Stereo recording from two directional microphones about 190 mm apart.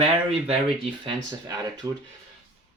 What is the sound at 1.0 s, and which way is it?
Speech, 20° right (ahead or behind).